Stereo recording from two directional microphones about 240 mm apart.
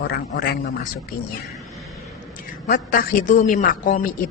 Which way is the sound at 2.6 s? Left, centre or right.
Left.